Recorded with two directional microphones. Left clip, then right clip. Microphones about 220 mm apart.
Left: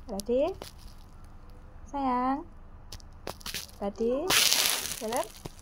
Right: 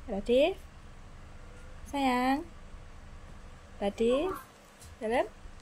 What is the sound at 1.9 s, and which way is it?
Speech, 15° right (ahead or behind).